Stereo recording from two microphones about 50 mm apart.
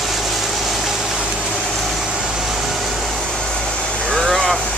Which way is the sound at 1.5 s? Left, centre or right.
Centre.